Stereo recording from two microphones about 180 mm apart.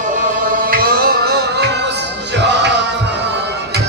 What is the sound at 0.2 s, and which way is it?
Music, 55° right (ahead or behind).